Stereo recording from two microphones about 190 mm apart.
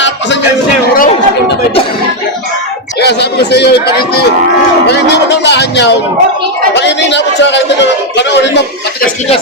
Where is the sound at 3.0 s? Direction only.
60° left (ahead or behind).